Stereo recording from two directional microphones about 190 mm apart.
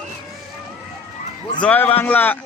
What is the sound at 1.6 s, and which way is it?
Speech, 10° left (ahead or behind).